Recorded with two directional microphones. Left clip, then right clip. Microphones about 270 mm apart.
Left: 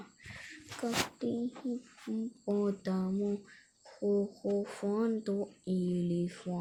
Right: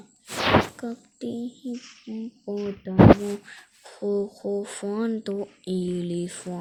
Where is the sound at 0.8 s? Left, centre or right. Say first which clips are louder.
Left 1 dB; centre.